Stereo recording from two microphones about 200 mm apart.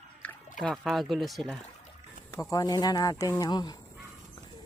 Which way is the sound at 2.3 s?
15° left (ahead or behind).